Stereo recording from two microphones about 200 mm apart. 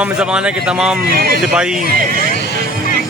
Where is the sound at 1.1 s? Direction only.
50° right (ahead or behind).